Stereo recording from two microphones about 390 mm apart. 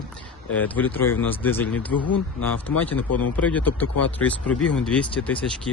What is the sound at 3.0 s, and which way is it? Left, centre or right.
Speech, left.